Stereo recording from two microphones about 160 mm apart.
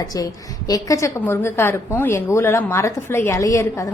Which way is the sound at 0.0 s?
25° left (ahead or behind).